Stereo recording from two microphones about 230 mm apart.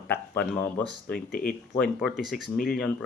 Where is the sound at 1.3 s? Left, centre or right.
Left.